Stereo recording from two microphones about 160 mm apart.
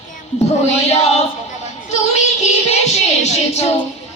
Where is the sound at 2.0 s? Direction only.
45° left (ahead or behind).